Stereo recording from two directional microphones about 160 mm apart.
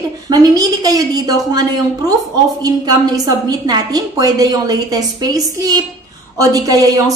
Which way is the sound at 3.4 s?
25° right (ahead or behind).